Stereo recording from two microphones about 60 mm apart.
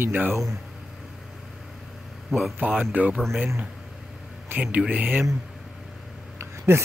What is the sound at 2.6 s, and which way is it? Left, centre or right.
Speech, centre.